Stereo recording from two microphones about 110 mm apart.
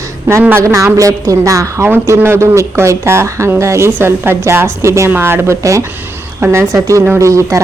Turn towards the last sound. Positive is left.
turn(degrees=-25)  # may be behind; listen again after turning